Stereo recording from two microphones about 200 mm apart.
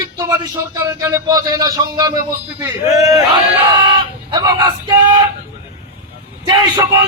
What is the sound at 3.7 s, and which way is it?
Chicken, 25° right (ahead or behind).